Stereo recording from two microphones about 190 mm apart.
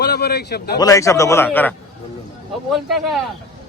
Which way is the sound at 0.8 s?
15° left (ahead or behind).